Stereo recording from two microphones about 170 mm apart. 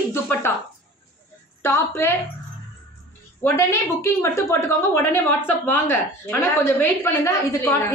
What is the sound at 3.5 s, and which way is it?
Speech, 15° left (ahead or behind).